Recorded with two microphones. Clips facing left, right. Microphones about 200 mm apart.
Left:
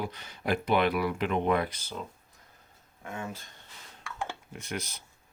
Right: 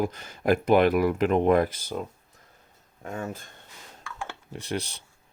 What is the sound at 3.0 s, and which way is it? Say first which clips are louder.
Speech: right 4 dB; 40° right (ahead or behind).